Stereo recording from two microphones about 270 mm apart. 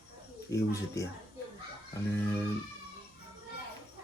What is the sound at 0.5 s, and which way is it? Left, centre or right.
Speech, centre.